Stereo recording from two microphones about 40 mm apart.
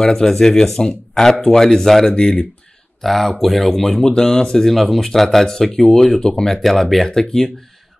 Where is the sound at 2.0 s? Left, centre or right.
Left.